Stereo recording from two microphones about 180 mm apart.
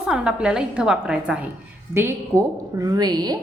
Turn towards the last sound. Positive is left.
turn(degrees=-20)  # may be behind; listen again after turning